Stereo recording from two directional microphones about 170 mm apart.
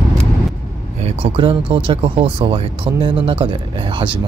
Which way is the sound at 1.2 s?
30° right (ahead or behind).